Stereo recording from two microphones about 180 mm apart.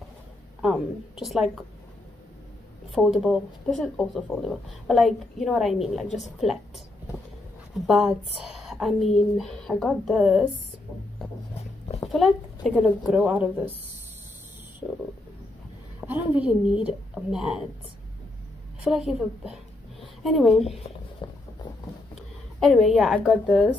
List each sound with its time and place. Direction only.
0.6 s speech: 5° right (ahead or behind)
2.9 s speech: centre (ahead or behind)
7.8 s speech: centre (ahead or behind)
12.7 s speech: 5° right (ahead or behind)
16.0 s speech: 5° right (ahead or behind)
18.9 s speech: centre (ahead or behind)
20.6 s a sound: 35° left (ahead or behind)
22.6 s speech: centre (ahead or behind)